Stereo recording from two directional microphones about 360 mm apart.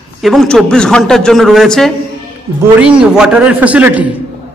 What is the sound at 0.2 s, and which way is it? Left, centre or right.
A man's voice, centre.